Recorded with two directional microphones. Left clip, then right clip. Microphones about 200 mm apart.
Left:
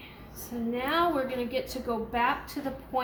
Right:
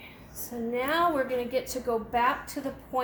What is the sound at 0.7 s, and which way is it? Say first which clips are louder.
A woman's voice: right 1 dB; 35° right (ahead or behind).